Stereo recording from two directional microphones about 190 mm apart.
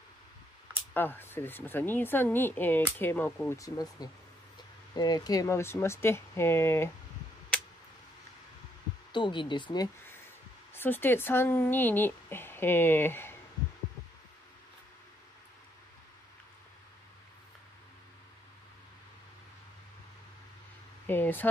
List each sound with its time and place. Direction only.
0.9 s speech: 10° left (ahead or behind)
9.1 s speech: 25° left (ahead or behind)
10.7 s speech: 10° left (ahead or behind)
21.1 s a sound: 10° left (ahead or behind)